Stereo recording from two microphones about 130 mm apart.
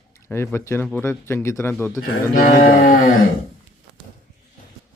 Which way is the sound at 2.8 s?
90° left.